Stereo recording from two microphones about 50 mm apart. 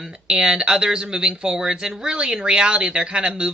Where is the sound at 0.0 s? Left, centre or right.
Right.